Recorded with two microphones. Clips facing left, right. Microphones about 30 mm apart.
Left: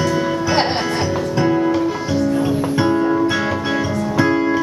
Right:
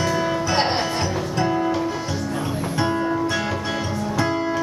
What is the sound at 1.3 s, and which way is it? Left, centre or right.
Music, centre.